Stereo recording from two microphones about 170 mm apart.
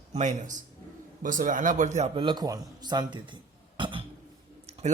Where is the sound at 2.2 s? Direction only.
25° right (ahead or behind).